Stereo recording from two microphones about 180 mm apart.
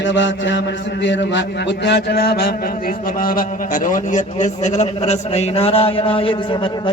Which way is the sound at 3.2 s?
50° left (ahead or behind).